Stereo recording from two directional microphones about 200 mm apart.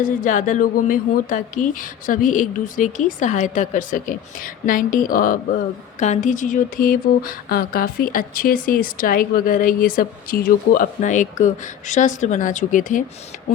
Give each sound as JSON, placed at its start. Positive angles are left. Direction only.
{"t": 0.0, "sound": "a woman's voice", "side_deg": 40}